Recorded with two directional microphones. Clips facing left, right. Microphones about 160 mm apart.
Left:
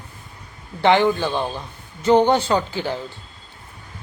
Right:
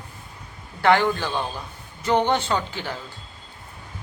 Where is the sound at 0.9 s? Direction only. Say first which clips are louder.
Left 3 dB; 15° left (ahead or behind).